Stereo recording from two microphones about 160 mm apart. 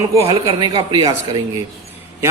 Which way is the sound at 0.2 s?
35° right (ahead or behind).